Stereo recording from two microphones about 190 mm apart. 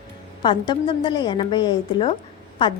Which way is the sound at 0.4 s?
25° left (ahead or behind).